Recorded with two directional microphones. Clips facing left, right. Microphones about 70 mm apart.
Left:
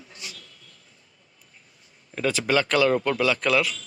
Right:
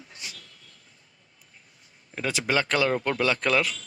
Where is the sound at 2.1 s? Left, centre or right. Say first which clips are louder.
Left 3 dB; centre.